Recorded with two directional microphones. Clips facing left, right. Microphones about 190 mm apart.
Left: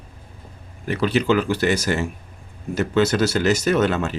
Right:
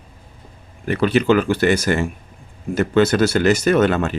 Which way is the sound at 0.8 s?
55° right (ahead or behind).